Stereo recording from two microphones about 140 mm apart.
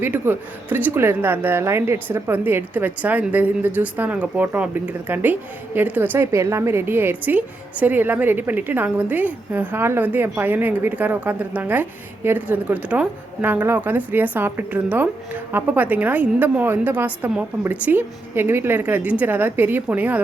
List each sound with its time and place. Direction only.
0.0 s a woman's voice: 15° right (ahead or behind)